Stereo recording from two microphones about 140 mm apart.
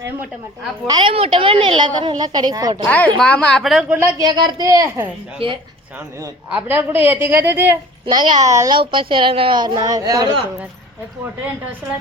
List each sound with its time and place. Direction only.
0.9 s a woman's voice: 35° right (ahead or behind)
2.8 s a woman's voice: 10° left (ahead or behind)
4.2 s a woman's voice: 30° right (ahead or behind)
5.4 s a woman's voice: 40° right (ahead or behind)
6.7 s a woman's voice: 10° right (ahead or behind)
8.0 s a woman's voice: 35° right (ahead or behind)
8.7 s a woman's voice: 35° right (ahead or behind)